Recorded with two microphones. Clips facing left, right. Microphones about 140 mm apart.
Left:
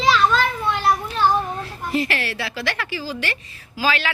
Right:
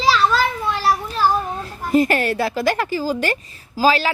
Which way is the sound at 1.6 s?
45° right (ahead or behind).